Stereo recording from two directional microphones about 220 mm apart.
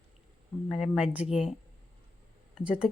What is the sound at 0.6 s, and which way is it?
Speech, centre (ahead or behind).